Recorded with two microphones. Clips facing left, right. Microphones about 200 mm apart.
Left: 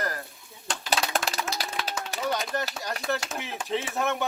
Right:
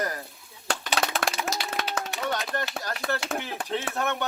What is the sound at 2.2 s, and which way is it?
Speech, centre (ahead or behind).